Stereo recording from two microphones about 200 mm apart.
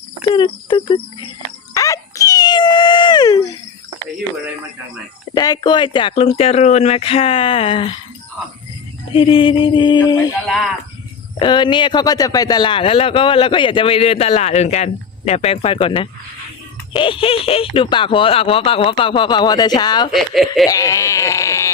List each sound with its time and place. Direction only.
0.3 s speech: 25° left (ahead or behind)
1.7 s dog: 15° left (ahead or behind)
5.3 s a man's voice: 20° left (ahead or behind)
9.1 s a man's voice: 25° left (ahead or behind)
11.3 s a man's voice: 25° left (ahead or behind)
20.1 s speech: centre (ahead or behind)
20.7 s speech: 15° left (ahead or behind)